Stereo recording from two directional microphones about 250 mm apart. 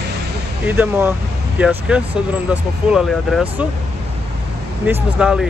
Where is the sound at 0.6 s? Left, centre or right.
Centre.